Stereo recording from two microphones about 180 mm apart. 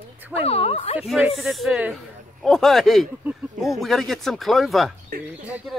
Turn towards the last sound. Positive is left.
turn(degrees=-5)  # may be behind; listen again after turning